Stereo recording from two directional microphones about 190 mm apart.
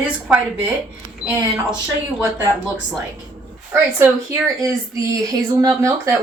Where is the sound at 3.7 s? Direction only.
15° right (ahead or behind).